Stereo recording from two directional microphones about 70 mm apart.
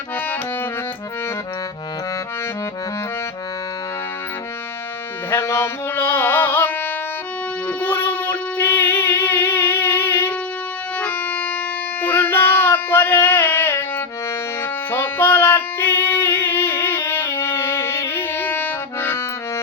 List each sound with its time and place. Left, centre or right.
5.3 s carnatic music: left
7.8 s music: left
11.0 s music: left
12.0 s a sound: left
14.8 s music: left